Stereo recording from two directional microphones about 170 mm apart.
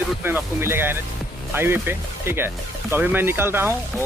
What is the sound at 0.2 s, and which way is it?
Speech, 15° right (ahead or behind).